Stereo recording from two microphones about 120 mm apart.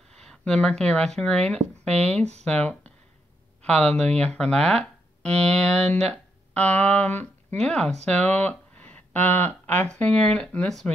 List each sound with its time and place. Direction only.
0.1 s speech: 5° left (ahead or behind)